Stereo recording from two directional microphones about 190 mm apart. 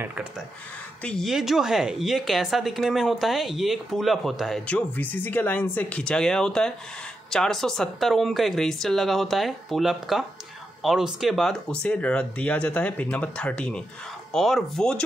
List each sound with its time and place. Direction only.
0.0 s a woman's voice: 10° right (ahead or behind)